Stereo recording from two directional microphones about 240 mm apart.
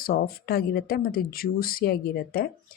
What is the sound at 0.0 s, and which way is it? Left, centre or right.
Speech, left.